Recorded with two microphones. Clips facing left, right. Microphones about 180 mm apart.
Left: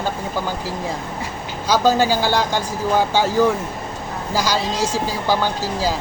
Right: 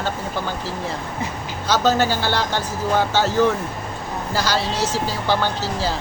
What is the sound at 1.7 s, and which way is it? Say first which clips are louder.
A man's voice: left 2 dB; 10° left (ahead or behind).